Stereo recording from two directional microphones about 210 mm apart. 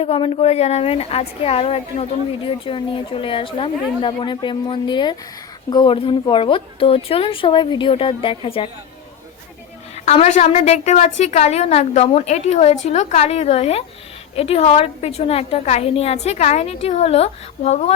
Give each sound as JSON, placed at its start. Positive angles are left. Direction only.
{"t": 0.0, "sound": "a woman's voice", "side_deg": 25}
{"t": 9.9, "sound": "a woman's voice", "side_deg": 30}